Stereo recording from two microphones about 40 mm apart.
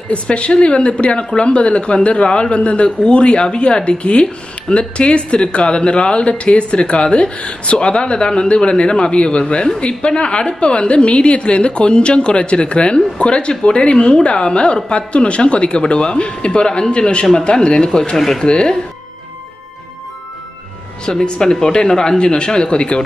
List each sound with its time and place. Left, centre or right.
0.1 s speech: left
18.1 s speech: centre
18.4 s speech: left
21.0 s speech: left